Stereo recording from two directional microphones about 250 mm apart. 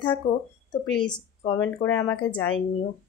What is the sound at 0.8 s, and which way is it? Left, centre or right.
Speech, centre.